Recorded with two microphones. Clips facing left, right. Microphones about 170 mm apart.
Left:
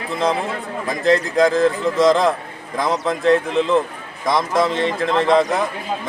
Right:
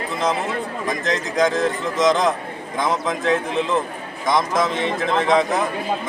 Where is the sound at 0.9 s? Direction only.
Centre (ahead or behind).